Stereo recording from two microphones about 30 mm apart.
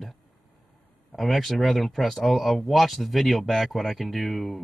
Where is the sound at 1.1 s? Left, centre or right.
Centre.